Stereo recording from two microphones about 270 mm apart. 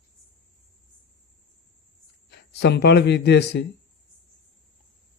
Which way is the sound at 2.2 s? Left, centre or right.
Left.